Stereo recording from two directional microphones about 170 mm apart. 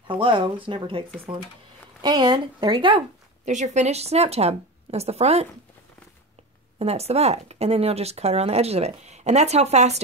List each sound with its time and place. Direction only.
0.1 s speech: 30° right (ahead or behind)
3.4 s speech: 45° right (ahead or behind)
6.8 s speech: 35° right (ahead or behind)